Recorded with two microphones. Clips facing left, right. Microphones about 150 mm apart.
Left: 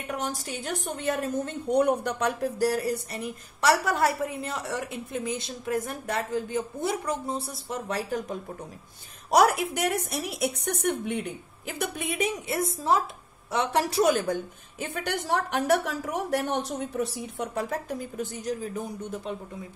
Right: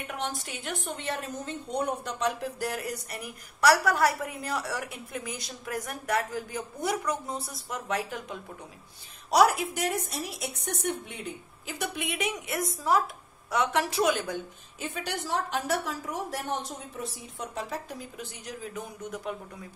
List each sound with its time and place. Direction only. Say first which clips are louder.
0.2 s a woman's voice: left 2 dB; 40° left (ahead or behind)
1.8 s a woman's voice: left 6 dB; 60° left (ahead or behind)
2.6 s a woman's voice: left 9 dB; 35° left (ahead or behind)
9.3 s a woman's voice: left 1 dB; 50° left (ahead or behind)
14.1 s a woman's voice: left 5 dB; 50° left (ahead or behind); by 19.3 s 30° left (ahead or behind)